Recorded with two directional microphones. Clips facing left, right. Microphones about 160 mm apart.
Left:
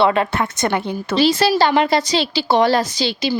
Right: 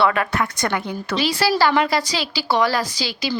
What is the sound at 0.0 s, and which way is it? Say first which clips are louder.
Speech: left 3 dB; 25° left (ahead or behind).